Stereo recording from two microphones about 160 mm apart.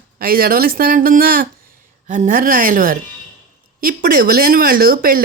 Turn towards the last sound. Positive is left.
turn(degrees=-65)  # may be behind; listen again after turning